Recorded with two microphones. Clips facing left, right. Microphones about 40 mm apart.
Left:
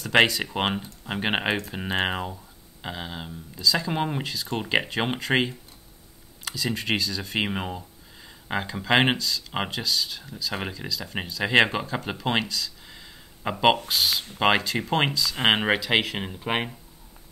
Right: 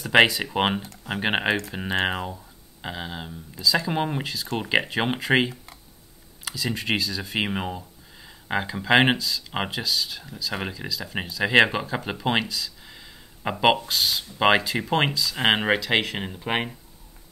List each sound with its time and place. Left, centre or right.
0.0 s speech: centre